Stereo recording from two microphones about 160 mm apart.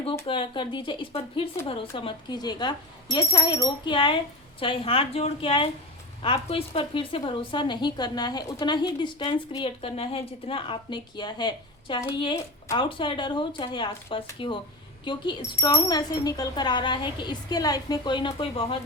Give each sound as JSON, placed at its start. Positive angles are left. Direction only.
{"t": 0.3, "sound": "a woman's voice", "side_deg": 30}